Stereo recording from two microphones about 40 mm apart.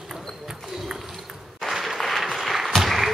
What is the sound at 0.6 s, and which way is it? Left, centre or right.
Run, centre.